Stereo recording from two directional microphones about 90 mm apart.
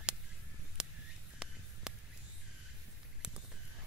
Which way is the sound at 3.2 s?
5° right (ahead or behind).